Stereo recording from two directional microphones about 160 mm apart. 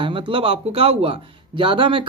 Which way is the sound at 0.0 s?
30° right (ahead or behind).